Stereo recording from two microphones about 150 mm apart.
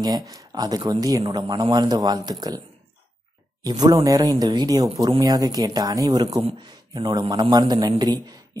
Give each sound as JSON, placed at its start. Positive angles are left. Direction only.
{"t": 0.0, "sound": "speech", "side_deg": -25}
{"t": 3.6, "sound": "speech", "side_deg": -25}